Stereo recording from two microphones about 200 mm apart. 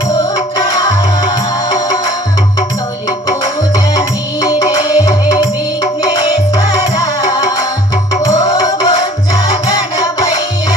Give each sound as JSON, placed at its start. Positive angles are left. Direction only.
{"t": 0.2, "sound": "music", "side_deg": 20}
{"t": 3.1, "sound": "music", "side_deg": 20}